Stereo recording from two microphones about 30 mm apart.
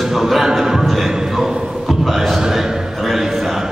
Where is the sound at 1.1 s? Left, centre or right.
Centre.